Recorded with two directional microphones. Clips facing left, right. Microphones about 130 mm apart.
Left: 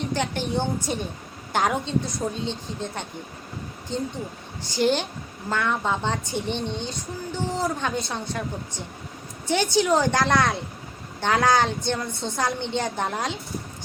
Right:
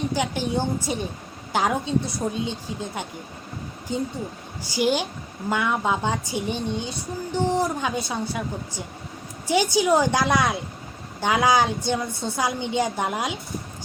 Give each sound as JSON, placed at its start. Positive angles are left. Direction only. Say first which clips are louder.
{"t": 0.1, "sound": "speech", "louder": "right 1 dB", "side_deg": -5}
{"t": 9.5, "sound": "speech", "louder": "right 1 dB", "side_deg": -10}